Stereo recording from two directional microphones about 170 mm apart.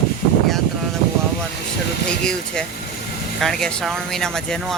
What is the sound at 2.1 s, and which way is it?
Speech, 5° left (ahead or behind).